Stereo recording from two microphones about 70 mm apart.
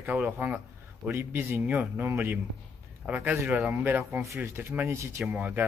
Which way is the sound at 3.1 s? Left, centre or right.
Centre.